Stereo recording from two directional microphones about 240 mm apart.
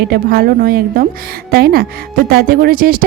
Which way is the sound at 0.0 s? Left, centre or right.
Right.